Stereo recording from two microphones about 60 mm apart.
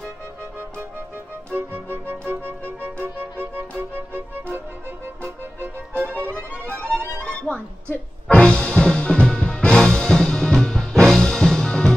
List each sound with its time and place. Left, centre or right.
1.5 s music: right
6.6 s music: left
7.0 s music: right
7.3 s music: left